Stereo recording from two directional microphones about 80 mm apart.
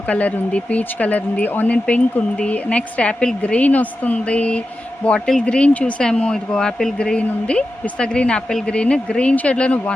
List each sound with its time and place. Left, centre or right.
0.1 s speech: centre